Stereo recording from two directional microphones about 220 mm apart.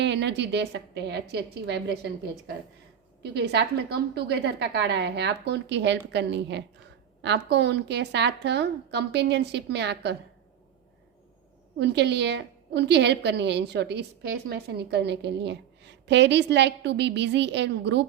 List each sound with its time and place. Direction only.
0.0 s a woman's voice: 50° right (ahead or behind)
3.3 s a woman's voice: 50° right (ahead or behind)
11.8 s a woman's voice: 50° right (ahead or behind)